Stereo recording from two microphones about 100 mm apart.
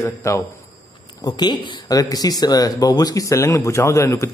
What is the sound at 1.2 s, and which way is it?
A man's voice, 45° left (ahead or behind).